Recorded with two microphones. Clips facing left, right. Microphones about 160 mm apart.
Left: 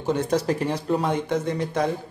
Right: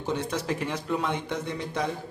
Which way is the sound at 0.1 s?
45° left (ahead or behind).